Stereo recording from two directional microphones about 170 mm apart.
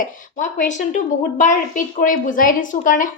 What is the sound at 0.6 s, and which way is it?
A woman's voice, 45° left (ahead or behind).